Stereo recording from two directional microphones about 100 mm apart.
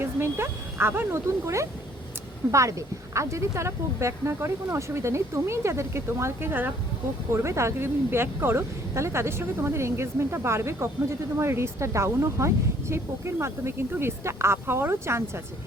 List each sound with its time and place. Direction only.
0.0 s speech: 25° right (ahead or behind)